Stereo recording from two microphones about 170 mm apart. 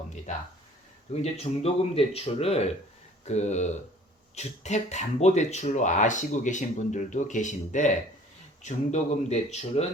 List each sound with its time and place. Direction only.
1.2 s speech: 35° left (ahead or behind)